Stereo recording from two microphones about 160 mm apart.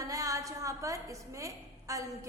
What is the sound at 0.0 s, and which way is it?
A woman's voice, 20° right (ahead or behind).